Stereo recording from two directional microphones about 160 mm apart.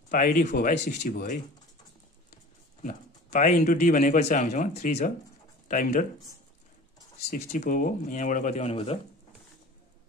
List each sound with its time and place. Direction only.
0.1 s speech: 55° left (ahead or behind)
2.8 s speech: 50° left (ahead or behind)
7.2 s speech: 75° left (ahead or behind)
7.6 s speech: 55° left (ahead or behind); by 8.9 s 40° left (ahead or behind)